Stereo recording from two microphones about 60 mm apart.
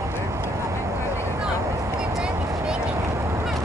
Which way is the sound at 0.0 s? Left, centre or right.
Right.